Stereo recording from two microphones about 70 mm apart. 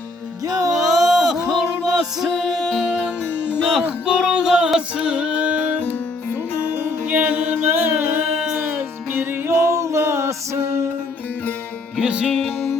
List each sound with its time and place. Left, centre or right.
0.4 s music: right
0.7 s music: centre
6.6 s music: right
11.9 s music: centre